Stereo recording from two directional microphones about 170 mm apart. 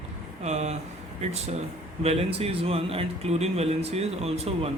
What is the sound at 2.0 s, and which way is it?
A man's voice, 35° right (ahead or behind).